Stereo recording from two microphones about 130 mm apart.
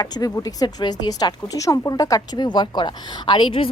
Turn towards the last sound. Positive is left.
turn(degrees=40)  # may be behind; listen again after turning